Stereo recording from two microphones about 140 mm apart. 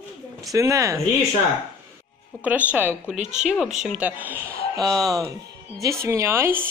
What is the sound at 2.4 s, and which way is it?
A woman's voice, 10° right (ahead or behind).